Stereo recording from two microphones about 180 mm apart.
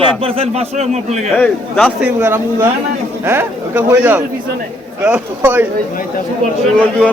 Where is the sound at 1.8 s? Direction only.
10° right (ahead or behind).